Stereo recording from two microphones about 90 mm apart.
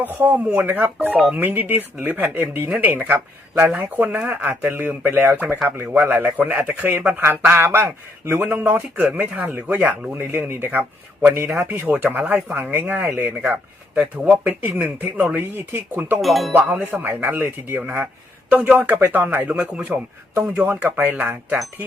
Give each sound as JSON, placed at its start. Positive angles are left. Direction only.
{"t": 0.0, "sound": "speech", "side_deg": -20}
{"t": 0.4, "sound": "speech", "side_deg": -10}
{"t": 16.2, "sound": "speech", "side_deg": 0}
{"t": 16.5, "sound": "speech", "side_deg": -20}